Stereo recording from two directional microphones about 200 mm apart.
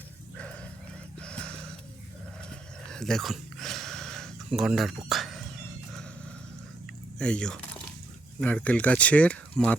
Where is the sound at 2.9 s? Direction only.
5° left (ahead or behind).